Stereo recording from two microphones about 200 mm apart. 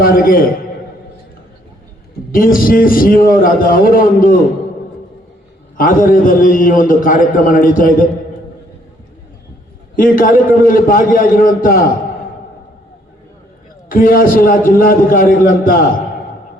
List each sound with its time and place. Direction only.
0.0 s a man's voice: 45° left (ahead or behind)
2.3 s a man's voice: 45° left (ahead or behind)
5.7 s a man's voice: 45° left (ahead or behind)
9.9 s a man's voice: 45° left (ahead or behind)
13.9 s a man's voice: 45° left (ahead or behind)